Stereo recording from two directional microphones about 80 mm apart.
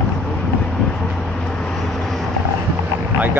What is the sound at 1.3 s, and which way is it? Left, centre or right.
Vehicle, centre.